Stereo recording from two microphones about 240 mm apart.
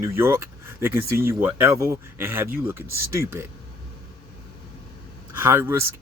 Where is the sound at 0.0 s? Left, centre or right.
Centre.